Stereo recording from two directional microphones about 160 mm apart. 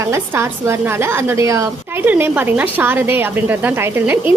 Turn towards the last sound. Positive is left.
turn(degrees=-15)  # may be behind; listen again after turning